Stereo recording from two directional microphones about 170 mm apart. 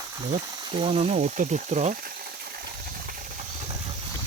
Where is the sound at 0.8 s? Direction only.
35° right (ahead or behind).